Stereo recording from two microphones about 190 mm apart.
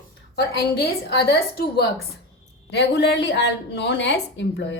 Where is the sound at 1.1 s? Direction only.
60° left (ahead or behind).